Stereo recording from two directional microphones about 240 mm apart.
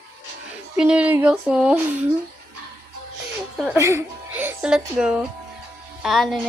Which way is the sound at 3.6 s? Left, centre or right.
Centre.